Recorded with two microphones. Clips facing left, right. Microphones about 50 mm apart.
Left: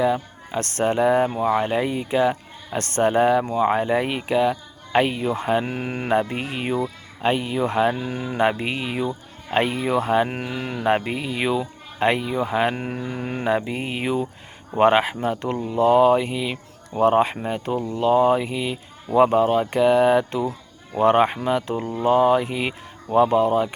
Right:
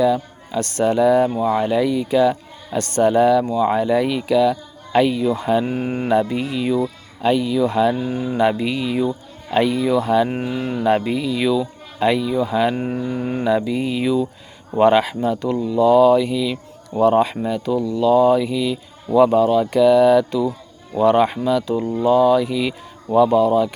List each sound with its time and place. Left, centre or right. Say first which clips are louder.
0.0 s speech: right 4 dB; left